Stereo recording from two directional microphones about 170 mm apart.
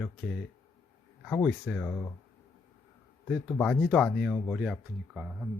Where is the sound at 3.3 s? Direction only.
5° left (ahead or behind).